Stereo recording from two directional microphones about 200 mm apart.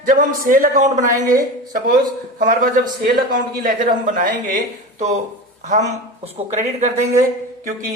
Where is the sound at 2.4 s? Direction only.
40° right (ahead or behind).